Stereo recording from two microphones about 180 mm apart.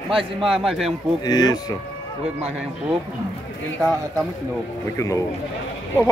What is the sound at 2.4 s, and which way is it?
Speech, 5° right (ahead or behind).